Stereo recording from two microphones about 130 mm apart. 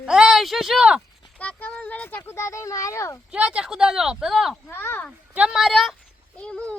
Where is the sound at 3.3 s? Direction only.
10° right (ahead or behind).